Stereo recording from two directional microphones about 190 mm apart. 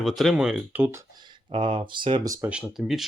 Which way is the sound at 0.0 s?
Centre (ahead or behind).